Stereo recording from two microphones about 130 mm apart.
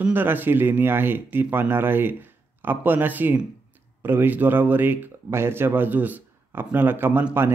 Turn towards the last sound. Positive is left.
turn(degrees=-15)  # may be behind; listen again after turning